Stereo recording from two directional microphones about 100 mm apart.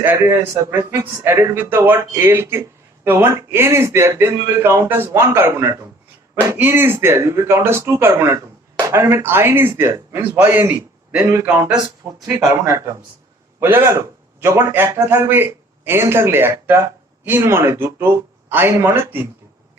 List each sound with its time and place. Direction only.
0.0 s a man's voice: 20° right (ahead or behind)
13.6 s a man's voice: 25° right (ahead or behind)